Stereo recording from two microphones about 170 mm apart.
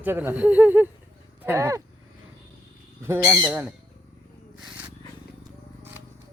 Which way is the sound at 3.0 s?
15° right (ahead or behind).